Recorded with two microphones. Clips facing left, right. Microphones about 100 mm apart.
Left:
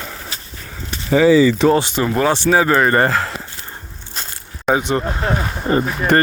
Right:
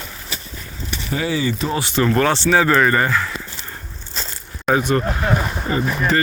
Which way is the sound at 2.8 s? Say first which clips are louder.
Left 3 dB; 35° left (ahead or behind).